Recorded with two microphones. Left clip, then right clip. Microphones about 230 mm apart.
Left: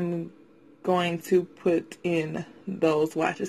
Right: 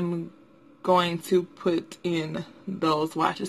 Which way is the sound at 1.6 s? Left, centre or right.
Centre.